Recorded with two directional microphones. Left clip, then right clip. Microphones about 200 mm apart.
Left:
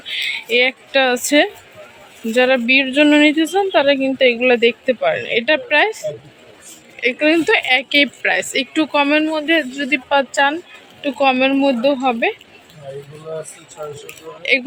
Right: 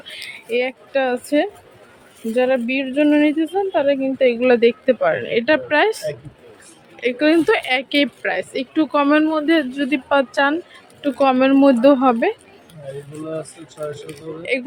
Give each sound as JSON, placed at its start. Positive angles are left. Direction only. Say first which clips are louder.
{"t": 0.0, "sound": "speech", "louder": "left 11 dB", "side_deg": -10}